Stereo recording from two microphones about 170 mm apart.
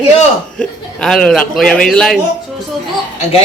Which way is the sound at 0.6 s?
5° left (ahead or behind).